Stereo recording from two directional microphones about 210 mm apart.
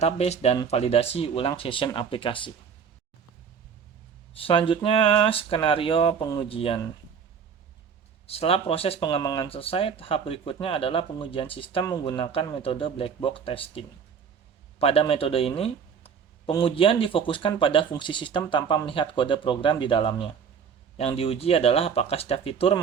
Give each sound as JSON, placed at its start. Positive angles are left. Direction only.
{"t": 0.0, "sound": "speech", "side_deg": 30}
{"t": 4.4, "sound": "speech", "side_deg": 25}
{"t": 8.3, "sound": "speech", "side_deg": 30}